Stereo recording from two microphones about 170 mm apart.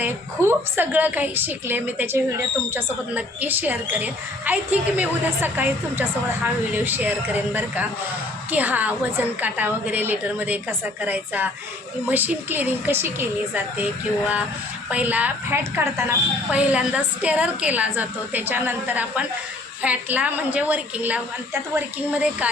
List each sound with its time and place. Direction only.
0.0 s speech: 10° right (ahead or behind)
14.8 s speech: 10° right (ahead or behind)